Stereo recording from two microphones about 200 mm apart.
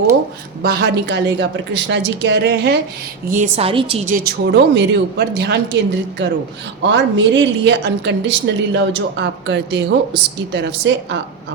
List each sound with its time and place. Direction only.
0.6 s a woman's voice: 55° right (ahead or behind)
3.2 s a woman's voice: 40° right (ahead or behind); by 11.2 s 65° right (ahead or behind)